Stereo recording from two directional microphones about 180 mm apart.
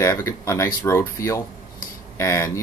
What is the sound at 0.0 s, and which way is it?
Speech, 15° left (ahead or behind).